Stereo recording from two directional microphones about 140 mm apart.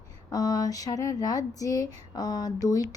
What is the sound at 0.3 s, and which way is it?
Speech, 25° left (ahead or behind).